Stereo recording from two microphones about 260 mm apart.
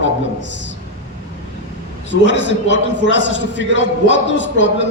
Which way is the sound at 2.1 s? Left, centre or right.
Left.